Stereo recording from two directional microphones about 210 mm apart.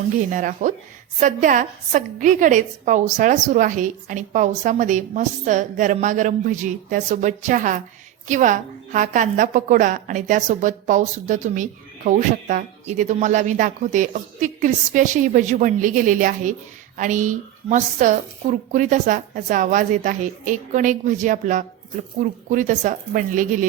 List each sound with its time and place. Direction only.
0.3 s a woman's voice: 40° right (ahead or behind)